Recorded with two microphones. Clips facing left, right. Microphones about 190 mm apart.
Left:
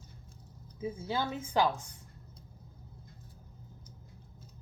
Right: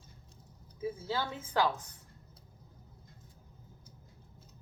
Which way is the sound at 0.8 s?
20° left (ahead or behind).